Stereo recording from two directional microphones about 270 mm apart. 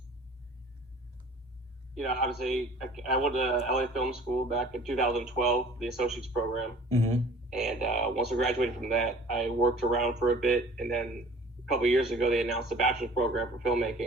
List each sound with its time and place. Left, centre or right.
2.0 s a man's voice: centre
6.8 s speech: right
7.5 s a man's voice: centre